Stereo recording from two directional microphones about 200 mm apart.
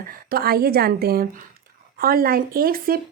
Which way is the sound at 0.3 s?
50° right (ahead or behind).